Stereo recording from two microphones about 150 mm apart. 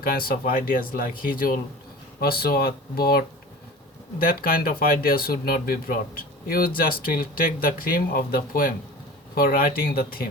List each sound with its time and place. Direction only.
0.0 s speech: 80° left
2.2 s speech: 90° left
4.2 s speech: 75° left (ahead or behind)